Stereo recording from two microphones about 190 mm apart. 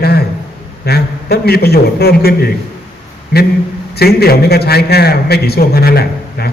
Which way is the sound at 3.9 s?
55° left (ahead or behind).